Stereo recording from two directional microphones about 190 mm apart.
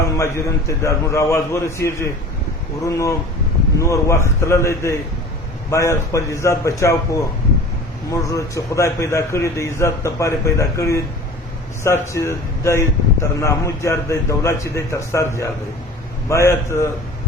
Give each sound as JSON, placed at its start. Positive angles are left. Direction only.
{"t": 0.0, "sound": "a man's voice", "side_deg": 15}